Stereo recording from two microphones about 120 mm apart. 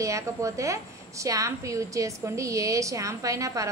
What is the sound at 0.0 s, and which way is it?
A woman's voice, 25° right (ahead or behind).